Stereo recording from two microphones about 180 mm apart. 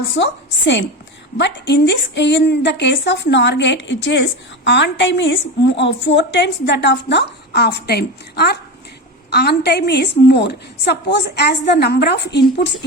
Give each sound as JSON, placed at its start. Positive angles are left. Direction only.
{"t": 0.1, "sound": "a woman's voice", "side_deg": 80}